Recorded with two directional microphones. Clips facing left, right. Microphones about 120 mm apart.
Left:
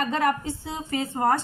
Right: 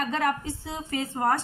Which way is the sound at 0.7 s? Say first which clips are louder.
Left 2 dB; 25° left (ahead or behind).